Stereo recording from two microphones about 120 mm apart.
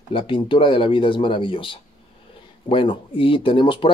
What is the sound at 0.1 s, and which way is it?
Speech, 45° left (ahead or behind).